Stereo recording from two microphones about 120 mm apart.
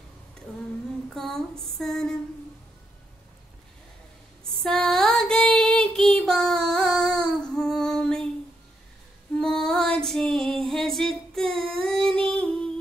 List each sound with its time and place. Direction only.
0.5 s a sound: 5° left (ahead or behind)
1.6 s female singing: 5° left (ahead or behind)
4.6 s child singing: 5° left (ahead or behind)
9.4 s female singing: 5° left (ahead or behind)